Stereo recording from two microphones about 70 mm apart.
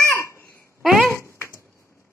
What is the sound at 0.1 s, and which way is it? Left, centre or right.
Babbling, left.